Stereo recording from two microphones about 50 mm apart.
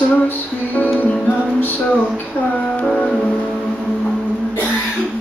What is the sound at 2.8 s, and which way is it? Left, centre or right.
Music, left.